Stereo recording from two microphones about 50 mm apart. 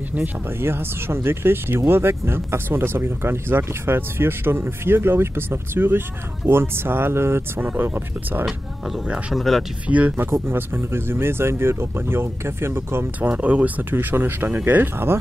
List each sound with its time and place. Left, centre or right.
0.6 s speech: right
7.6 s speech: right
9.3 s speech: centre
9.8 s speech: right
10.5 s speech: right
13.2 s speech: right